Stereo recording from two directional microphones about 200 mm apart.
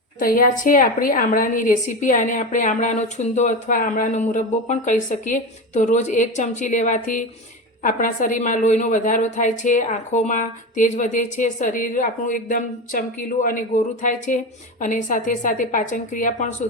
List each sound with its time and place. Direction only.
0.2 s a woman's voice: 45° left (ahead or behind)